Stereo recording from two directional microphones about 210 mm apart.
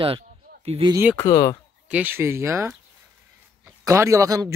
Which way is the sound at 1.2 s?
15° left (ahead or behind).